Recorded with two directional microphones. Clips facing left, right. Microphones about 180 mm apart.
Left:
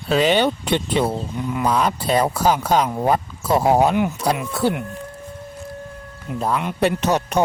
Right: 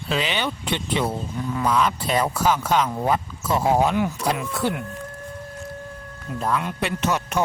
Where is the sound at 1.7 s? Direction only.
35° left (ahead or behind).